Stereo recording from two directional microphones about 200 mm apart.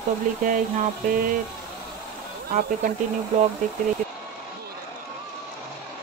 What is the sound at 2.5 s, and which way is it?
Speech, 45° right (ahead or behind).